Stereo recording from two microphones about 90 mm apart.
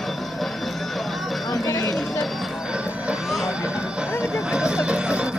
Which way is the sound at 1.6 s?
40° left (ahead or behind).